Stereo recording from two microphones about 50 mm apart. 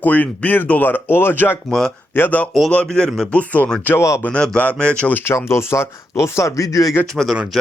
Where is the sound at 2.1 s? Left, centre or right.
Left.